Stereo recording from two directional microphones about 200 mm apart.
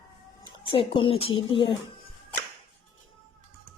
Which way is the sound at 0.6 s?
25° left (ahead or behind).